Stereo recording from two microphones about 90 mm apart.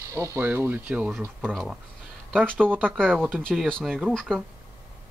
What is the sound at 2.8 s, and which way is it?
Speech, 5° left (ahead or behind).